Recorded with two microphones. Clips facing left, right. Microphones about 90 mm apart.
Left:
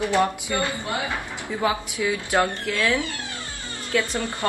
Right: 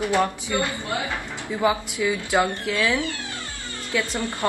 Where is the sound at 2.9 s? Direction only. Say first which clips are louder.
Right 1 dB; 20° left (ahead or behind).